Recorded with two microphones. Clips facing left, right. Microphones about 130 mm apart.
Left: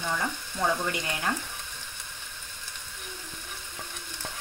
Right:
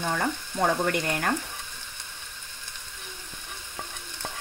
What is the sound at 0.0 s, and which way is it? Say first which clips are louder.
Speech: right 3 dB; 50° right (ahead or behind).